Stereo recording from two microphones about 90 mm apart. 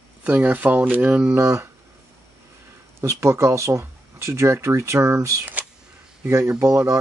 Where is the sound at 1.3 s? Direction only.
30° right (ahead or behind).